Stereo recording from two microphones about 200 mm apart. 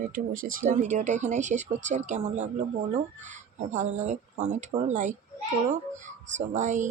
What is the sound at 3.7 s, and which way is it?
Speech, 40° right (ahead or behind).